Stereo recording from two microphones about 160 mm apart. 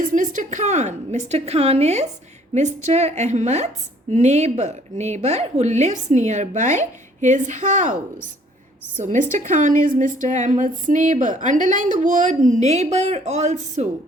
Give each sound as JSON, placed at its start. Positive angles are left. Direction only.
{"t": 0.1, "sound": "a woman's voice", "side_deg": -55}
{"t": 9.0, "sound": "a woman's voice", "side_deg": -55}